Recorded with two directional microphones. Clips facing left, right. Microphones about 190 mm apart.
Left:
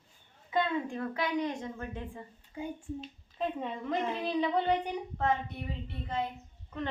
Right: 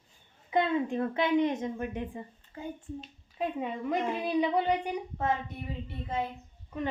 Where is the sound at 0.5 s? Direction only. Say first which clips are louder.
Right 4 dB; 20° right (ahead or behind).